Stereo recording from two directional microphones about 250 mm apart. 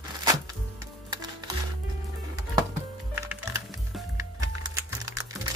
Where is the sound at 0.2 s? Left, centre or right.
Centre.